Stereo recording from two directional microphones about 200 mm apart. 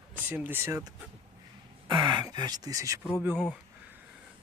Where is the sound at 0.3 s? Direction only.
10° right (ahead or behind).